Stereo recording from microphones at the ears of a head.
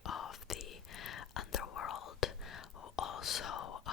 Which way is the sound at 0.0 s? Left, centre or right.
Left.